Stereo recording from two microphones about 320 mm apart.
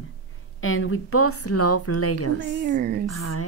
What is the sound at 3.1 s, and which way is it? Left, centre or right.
Speech, left.